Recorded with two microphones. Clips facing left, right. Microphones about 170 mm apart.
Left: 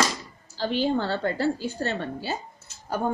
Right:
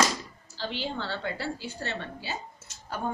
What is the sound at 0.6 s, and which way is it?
A woman's voice, 45° left (ahead or behind).